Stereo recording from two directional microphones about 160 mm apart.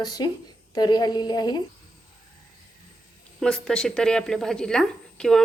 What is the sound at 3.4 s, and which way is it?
A woman's voice, 5° left (ahead or behind).